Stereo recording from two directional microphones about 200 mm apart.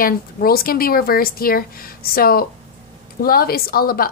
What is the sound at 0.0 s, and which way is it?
A woman's voice, 45° left (ahead or behind).